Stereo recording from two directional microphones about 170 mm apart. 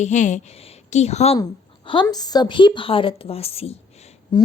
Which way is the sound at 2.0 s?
25° left (ahead or behind).